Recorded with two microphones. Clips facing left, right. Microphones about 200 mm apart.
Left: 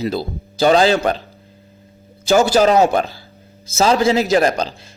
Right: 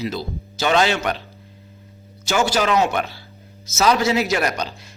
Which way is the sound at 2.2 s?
35° left (ahead or behind).